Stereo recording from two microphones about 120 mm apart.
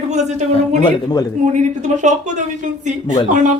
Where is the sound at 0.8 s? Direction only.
35° left (ahead or behind).